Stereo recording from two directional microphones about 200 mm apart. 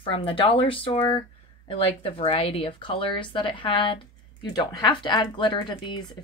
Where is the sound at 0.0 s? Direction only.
25° left (ahead or behind).